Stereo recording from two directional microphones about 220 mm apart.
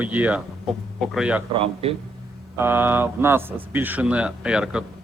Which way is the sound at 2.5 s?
10° right (ahead or behind).